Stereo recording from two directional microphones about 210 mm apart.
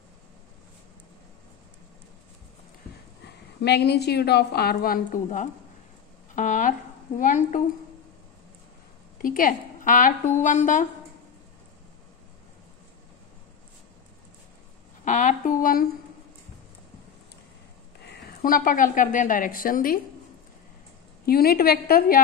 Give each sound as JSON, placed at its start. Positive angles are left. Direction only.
{"t": 3.3, "sound": "a woman's voice", "side_deg": 50}
{"t": 9.2, "sound": "a woman's voice", "side_deg": 40}
{"t": 15.0, "sound": "speech", "side_deg": 40}
{"t": 18.0, "sound": "a woman's voice", "side_deg": 45}
{"t": 21.3, "sound": "a woman's voice", "side_deg": 45}